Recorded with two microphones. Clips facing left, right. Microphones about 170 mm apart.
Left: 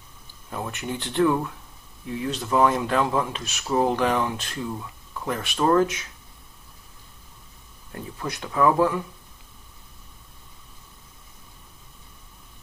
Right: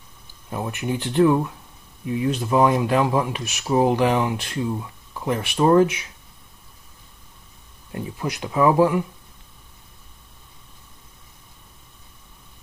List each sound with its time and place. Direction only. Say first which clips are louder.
0.5 s speech: right 4 dB; 15° right (ahead or behind)
7.9 s speech: right 4 dB; 15° right (ahead or behind)